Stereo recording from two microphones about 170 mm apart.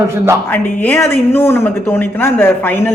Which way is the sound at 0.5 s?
10° left (ahead or behind).